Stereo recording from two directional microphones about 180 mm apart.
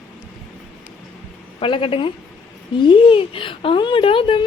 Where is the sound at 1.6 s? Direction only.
30° left (ahead or behind).